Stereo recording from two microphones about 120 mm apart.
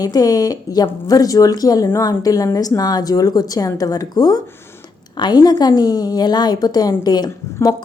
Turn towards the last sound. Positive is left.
turn(degrees=35)  # may be behind; listen again after turning